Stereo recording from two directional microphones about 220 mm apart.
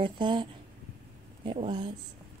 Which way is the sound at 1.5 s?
25° right (ahead or behind).